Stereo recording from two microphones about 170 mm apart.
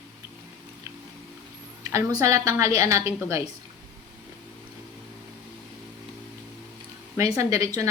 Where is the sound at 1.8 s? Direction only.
15° right (ahead or behind).